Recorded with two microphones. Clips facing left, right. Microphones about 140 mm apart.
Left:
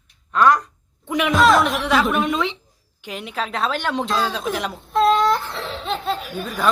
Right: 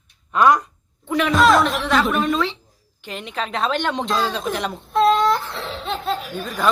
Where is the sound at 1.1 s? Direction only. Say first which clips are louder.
Right 1 dB; 15° left (ahead or behind).